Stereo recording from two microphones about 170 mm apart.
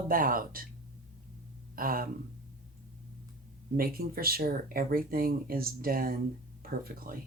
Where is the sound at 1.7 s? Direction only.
55° right (ahead or behind).